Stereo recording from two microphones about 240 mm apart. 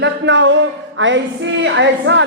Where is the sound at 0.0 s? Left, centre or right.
Right.